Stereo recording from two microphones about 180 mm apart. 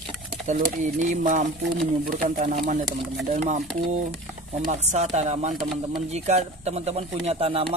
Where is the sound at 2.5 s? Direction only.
40° right (ahead or behind).